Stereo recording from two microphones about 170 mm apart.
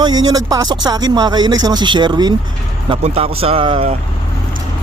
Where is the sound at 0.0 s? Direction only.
25° right (ahead or behind).